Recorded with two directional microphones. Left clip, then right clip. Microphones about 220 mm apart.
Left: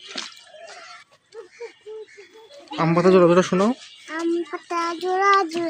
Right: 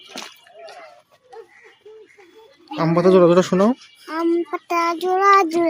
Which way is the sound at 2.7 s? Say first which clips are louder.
Right 2 dB; 5° right (ahead or behind).